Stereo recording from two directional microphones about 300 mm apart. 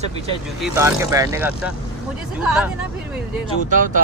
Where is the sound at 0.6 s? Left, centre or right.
Centre.